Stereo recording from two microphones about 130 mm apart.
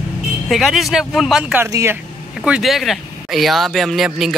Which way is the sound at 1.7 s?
25° right (ahead or behind).